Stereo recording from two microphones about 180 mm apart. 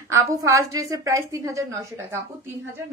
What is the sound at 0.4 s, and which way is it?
A woman's voice, 15° right (ahead or behind).